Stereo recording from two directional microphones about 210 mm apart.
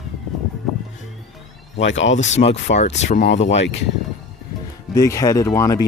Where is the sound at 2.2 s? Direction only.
30° left (ahead or behind).